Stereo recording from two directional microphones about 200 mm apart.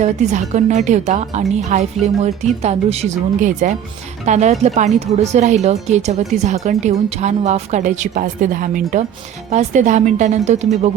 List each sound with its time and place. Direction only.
0.0 s speech: 35° right (ahead or behind)